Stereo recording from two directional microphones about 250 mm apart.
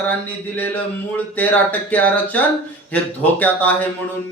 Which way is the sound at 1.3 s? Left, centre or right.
Centre.